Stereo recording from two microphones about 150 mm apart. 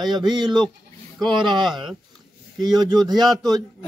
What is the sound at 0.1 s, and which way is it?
A man's voice, 30° right (ahead or behind).